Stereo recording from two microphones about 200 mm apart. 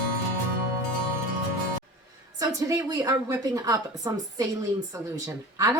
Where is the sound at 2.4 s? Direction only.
20° right (ahead or behind).